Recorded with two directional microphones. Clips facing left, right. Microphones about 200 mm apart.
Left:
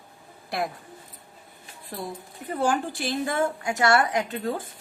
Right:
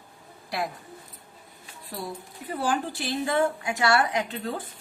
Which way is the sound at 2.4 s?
45° left (ahead or behind).